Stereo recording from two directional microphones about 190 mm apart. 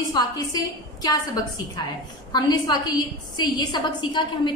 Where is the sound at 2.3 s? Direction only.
20° left (ahead or behind).